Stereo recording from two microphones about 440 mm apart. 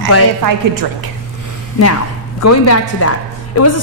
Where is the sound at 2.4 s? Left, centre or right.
Left.